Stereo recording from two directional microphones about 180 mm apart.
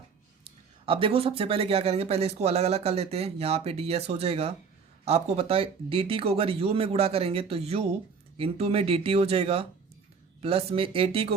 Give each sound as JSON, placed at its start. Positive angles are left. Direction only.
{"t": 0.4, "sound": "speech", "side_deg": -30}